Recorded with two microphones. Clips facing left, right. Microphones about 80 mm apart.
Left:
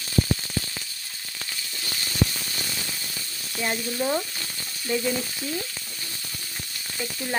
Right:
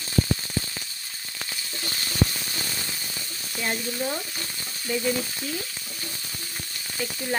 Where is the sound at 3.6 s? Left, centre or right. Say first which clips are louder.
Left 2 dB; centre.